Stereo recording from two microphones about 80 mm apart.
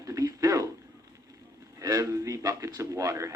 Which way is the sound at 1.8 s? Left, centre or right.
Right.